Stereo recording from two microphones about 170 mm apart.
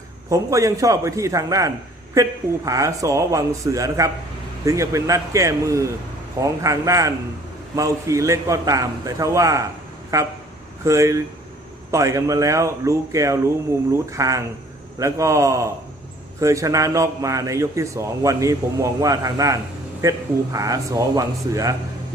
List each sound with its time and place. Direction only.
0.3 s a man's voice: 20° right (ahead or behind)